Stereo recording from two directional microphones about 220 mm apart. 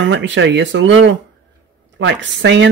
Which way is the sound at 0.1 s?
55° right (ahead or behind).